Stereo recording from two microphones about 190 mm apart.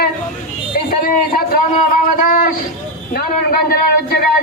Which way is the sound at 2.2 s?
45° left (ahead or behind).